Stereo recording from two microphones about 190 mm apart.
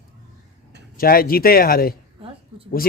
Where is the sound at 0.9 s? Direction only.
50° left (ahead or behind).